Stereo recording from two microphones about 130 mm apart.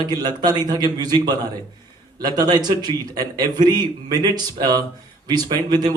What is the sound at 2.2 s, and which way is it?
A man's voice, 30° right (ahead or behind).